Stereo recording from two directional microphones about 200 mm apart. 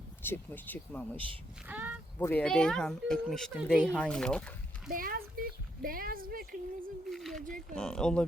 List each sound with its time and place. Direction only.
0.2 s speech: 10° left (ahead or behind)
1.6 s speech: 10° right (ahead or behind)
2.1 s speech: 10° left (ahead or behind)
4.9 s a sound: 45° right (ahead or behind)
7.1 s a sound: centre (ahead or behind)
7.4 s speech: 40° right (ahead or behind)
7.8 s speech: 5° left (ahead or behind)